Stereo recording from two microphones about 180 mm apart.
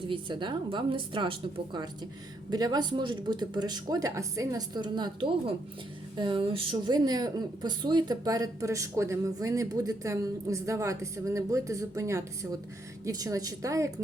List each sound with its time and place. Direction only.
0.1 s a woman's voice: 25° right (ahead or behind)
2.5 s a woman's voice: 20° right (ahead or behind)